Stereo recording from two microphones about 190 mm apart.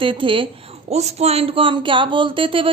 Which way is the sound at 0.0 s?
25° right (ahead or behind).